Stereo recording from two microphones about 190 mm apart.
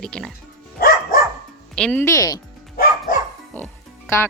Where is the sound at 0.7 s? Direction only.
50° left (ahead or behind).